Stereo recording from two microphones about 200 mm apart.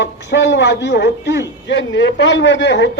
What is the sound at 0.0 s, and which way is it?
Speech, 60° left (ahead or behind).